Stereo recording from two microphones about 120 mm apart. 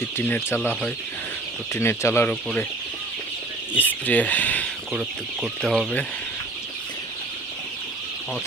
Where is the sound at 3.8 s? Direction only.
15° left (ahead or behind).